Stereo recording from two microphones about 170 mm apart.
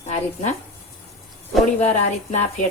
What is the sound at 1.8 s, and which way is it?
Speech, 40° left (ahead or behind).